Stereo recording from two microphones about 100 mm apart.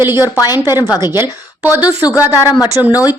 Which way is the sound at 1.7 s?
15° right (ahead or behind).